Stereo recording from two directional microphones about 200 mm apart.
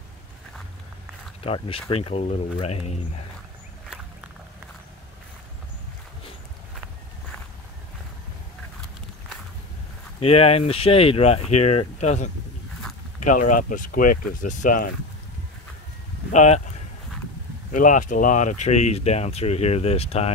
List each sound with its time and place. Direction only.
1.4 s speech: 30° left (ahead or behind)
10.2 s speech: 30° left (ahead or behind)
16.3 s speech: 35° left (ahead or behind)
17.7 s speech: 40° left (ahead or behind)